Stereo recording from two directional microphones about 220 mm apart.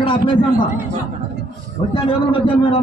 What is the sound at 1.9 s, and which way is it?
Speech, 25° left (ahead or behind).